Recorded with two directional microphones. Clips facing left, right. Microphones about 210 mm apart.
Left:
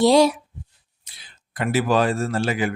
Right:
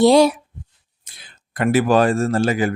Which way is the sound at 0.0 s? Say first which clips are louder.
Right 3 dB; 60° right (ahead or behind).